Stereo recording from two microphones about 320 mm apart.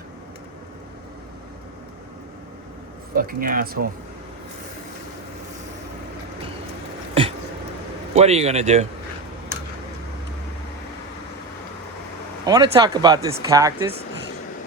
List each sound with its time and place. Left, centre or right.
3.2 s speech: right
7.1 s a sound: centre
8.1 s speech: centre
12.5 s speech: centre